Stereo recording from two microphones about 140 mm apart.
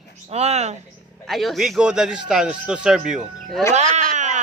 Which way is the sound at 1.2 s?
Centre (ahead or behind).